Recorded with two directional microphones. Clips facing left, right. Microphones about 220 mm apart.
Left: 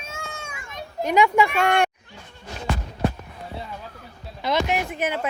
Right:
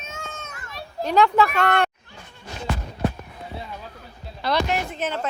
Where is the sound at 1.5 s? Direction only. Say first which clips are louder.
Left 1 dB; 10° left (ahead or behind).